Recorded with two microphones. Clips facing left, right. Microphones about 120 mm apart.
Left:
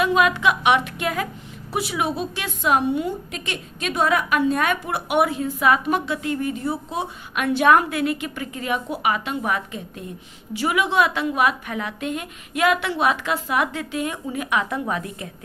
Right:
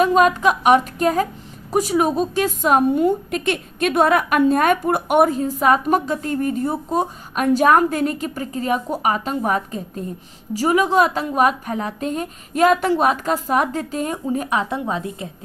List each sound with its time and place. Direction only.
0.0 s a woman's voice: 40° right (ahead or behind); by 15.3 s 25° right (ahead or behind)